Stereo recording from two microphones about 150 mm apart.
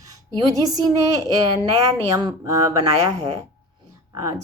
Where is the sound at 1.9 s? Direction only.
20° right (ahead or behind).